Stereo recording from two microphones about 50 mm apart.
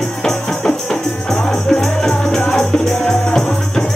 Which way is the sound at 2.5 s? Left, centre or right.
Centre.